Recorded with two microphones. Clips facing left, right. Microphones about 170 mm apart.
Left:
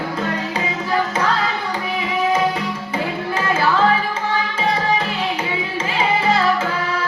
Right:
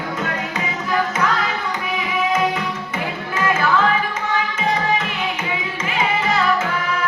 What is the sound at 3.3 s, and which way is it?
Music, 30° left (ahead or behind).